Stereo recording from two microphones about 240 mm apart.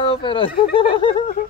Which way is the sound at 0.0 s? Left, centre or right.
Left.